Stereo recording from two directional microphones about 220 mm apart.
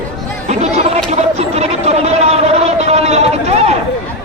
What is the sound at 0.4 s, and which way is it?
Chatter, 30° right (ahead or behind).